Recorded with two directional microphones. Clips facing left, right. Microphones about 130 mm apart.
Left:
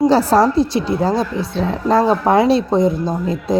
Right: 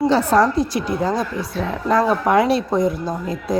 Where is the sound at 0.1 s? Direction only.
35° left (ahead or behind).